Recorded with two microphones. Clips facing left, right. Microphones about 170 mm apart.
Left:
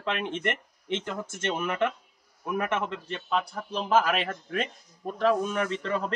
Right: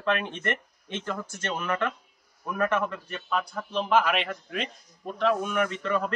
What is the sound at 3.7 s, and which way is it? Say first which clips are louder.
A man's voice: even; 40° left (ahead or behind).